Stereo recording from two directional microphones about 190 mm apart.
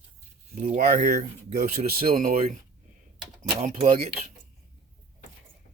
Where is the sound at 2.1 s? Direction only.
45° right (ahead or behind).